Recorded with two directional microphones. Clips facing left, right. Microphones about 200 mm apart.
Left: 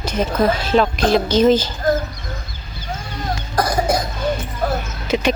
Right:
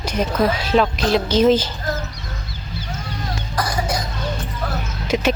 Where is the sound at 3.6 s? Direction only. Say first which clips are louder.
Left 5 dB; 50° left (ahead or behind).